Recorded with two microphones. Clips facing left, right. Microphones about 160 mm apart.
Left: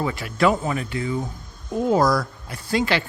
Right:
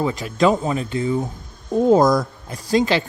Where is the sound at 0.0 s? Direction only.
20° right (ahead or behind).